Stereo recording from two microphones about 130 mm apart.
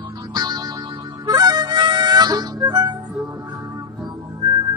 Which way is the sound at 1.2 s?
30° right (ahead or behind).